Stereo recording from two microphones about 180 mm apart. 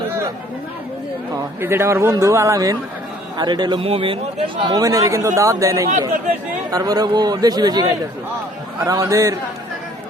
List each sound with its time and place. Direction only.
1.6 s a man's voice: 15° right (ahead or behind)